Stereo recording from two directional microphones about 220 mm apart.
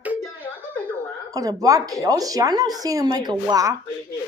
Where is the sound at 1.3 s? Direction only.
15° right (ahead or behind).